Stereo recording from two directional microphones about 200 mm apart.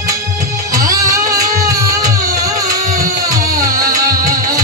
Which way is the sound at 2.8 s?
40° right (ahead or behind).